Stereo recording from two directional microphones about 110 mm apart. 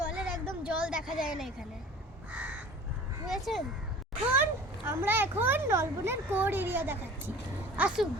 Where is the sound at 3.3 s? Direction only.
Centre (ahead or behind).